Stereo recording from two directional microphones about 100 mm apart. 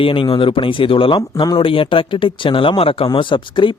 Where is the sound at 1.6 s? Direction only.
60° left (ahead or behind).